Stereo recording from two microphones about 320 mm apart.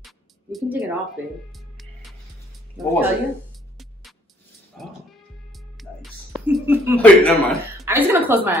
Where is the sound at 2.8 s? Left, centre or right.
Centre.